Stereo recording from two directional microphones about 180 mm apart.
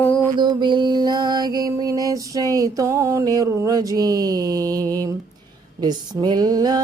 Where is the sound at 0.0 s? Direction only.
10° left (ahead or behind).